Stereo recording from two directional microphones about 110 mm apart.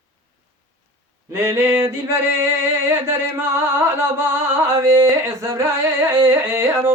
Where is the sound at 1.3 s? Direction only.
25° right (ahead or behind).